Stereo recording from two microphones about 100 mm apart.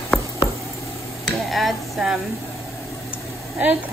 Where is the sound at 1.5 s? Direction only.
Centre (ahead or behind).